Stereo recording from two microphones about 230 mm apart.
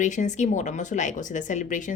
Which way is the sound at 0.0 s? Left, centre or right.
Left.